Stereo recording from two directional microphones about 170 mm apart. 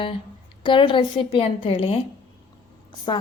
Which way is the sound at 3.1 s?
25° left (ahead or behind).